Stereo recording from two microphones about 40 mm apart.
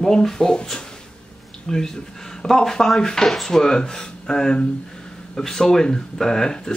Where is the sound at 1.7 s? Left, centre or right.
Centre.